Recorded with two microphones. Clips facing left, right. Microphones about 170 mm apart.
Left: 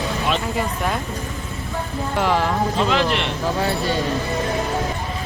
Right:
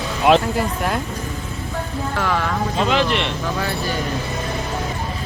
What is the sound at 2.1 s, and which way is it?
Speech, 25° left (ahead or behind).